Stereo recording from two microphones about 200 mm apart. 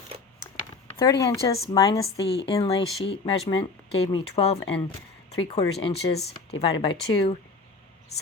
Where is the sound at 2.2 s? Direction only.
55° left (ahead or behind).